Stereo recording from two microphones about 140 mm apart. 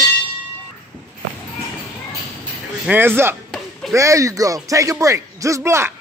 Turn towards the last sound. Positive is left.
turn(degrees=-20)  # may be behind; listen again after turning